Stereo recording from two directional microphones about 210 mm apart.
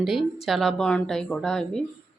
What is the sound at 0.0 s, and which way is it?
A woman's voice, centre (ahead or behind).